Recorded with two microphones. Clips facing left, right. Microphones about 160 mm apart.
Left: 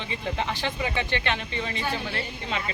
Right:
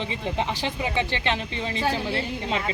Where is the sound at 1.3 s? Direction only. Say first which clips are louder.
Right 2 dB; 25° right (ahead or behind).